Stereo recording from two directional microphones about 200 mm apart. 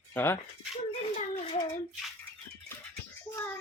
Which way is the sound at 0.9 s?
30° left (ahead or behind).